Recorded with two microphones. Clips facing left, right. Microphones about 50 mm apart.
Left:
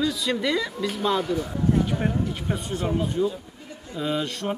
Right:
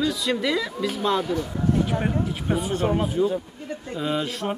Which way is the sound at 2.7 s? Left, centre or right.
Right.